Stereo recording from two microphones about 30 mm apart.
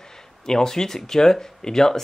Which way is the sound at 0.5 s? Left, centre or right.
Centre.